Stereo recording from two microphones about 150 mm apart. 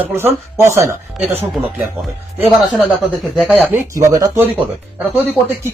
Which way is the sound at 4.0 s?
20° right (ahead or behind).